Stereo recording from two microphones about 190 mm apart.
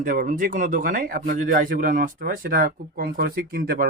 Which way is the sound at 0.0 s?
45° right (ahead or behind).